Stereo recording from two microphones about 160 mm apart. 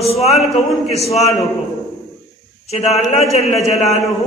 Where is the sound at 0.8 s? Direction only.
40° left (ahead or behind).